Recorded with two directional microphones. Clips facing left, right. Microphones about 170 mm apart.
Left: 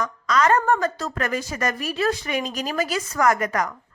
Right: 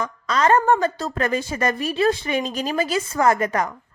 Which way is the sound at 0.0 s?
30° right (ahead or behind).